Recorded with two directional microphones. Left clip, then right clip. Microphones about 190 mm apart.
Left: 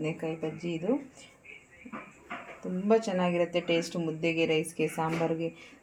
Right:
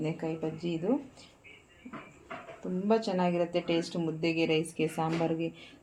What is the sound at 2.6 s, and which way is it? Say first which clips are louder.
Speech: left 2 dB; 5° left (ahead or behind).